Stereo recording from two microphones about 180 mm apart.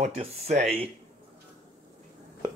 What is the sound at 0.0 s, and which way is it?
Speech, 35° right (ahead or behind).